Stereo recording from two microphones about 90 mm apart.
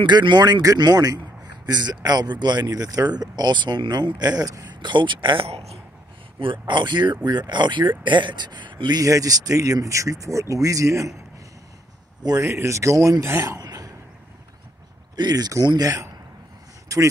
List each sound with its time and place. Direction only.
0.0 s a man's voice: 55° right (ahead or behind)
6.7 s a man's voice: 60° right (ahead or behind)
9.0 s speech: 40° right (ahead or behind)
12.4 s speech: 30° right (ahead or behind)
13.2 s a sound: 30° right (ahead or behind)
15.1 s a man's voice: 50° right (ahead or behind)
16.9 s speech: 40° right (ahead or behind)